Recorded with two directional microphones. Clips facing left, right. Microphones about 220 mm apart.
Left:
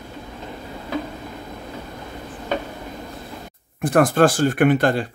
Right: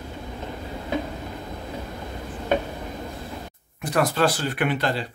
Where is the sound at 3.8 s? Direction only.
50° left (ahead or behind).